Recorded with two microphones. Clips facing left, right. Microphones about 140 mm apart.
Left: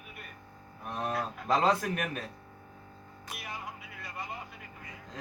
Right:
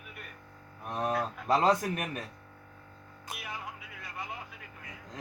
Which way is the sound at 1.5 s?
20° right (ahead or behind).